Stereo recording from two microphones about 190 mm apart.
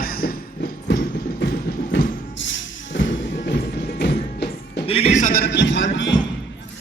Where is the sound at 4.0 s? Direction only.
60° left (ahead or behind).